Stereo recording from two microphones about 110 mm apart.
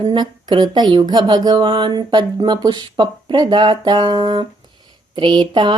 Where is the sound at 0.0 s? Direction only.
45° right (ahead or behind).